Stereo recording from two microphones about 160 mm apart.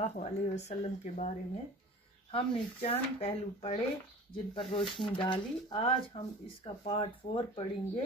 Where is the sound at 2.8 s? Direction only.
40° left (ahead or behind).